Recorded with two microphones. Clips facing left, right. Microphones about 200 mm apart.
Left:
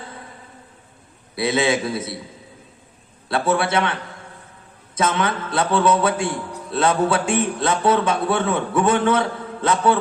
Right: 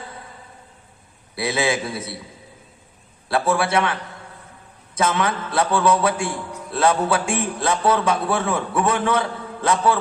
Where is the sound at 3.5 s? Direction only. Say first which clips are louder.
Left 1 dB; 30° left (ahead or behind).